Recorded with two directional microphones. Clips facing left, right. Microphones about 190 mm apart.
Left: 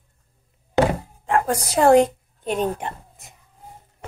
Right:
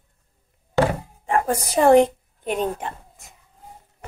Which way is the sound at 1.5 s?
15° right (ahead or behind).